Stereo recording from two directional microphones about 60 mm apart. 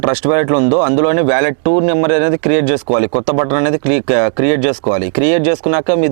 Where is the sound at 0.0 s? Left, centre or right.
Right.